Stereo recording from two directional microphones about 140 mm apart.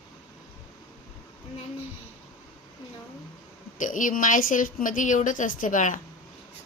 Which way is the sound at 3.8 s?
70° left (ahead or behind).